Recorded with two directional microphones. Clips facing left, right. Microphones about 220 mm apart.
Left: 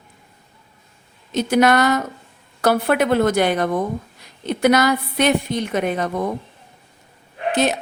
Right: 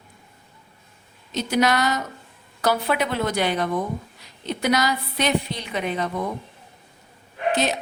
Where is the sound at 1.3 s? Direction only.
55° left (ahead or behind).